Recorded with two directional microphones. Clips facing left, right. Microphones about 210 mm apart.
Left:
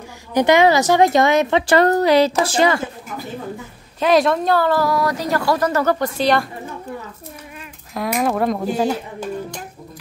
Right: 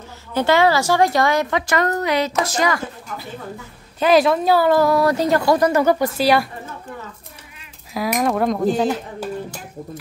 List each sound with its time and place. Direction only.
0.3 s a woman's voice: 15° left (ahead or behind)
4.0 s speech: centre (ahead or behind)
7.9 s speech: centre (ahead or behind)